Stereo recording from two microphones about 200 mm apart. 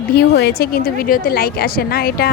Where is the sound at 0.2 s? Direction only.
55° left (ahead or behind).